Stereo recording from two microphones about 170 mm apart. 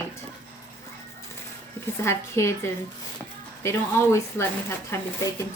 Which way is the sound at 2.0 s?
15° left (ahead or behind).